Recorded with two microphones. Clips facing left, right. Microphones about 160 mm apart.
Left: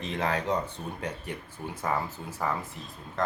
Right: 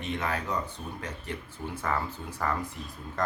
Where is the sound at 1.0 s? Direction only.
15° left (ahead or behind).